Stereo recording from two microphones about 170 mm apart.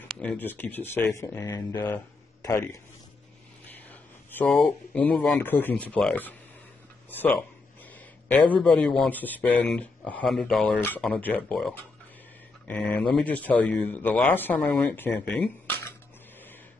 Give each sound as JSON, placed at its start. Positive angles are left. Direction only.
{"t": 0.1, "sound": "speech", "side_deg": 5}